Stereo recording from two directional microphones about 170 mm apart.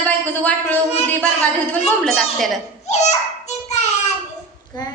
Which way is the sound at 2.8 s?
40° left (ahead or behind).